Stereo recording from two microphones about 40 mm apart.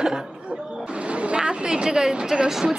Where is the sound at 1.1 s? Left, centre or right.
Right.